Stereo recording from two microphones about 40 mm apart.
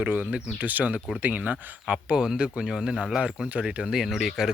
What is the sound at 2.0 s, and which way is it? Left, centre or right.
Speech, right.